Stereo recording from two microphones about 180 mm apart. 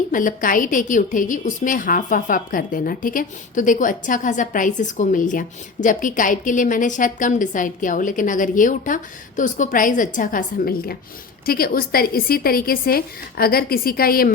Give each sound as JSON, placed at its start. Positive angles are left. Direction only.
{"t": 0.1, "sound": "a woman's voice", "side_deg": 50}